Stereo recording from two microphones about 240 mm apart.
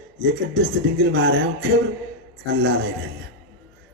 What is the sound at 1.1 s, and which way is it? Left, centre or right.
Speech, right.